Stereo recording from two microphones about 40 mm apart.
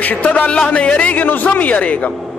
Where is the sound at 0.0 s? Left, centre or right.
Left.